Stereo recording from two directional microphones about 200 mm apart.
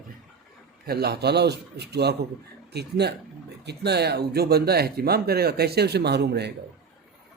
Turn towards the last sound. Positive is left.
turn(degrees=-55)  # may be behind; listen again after turning